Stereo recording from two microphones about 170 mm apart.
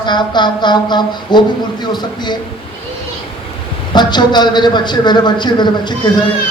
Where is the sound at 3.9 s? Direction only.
25° left (ahead or behind).